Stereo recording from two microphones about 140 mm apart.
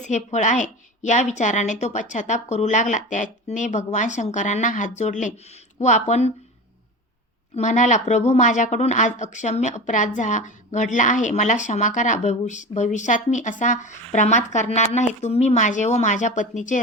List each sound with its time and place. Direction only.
0.0 s a woman's voice: 60° left (ahead or behind)
7.5 s a woman's voice: 60° left (ahead or behind)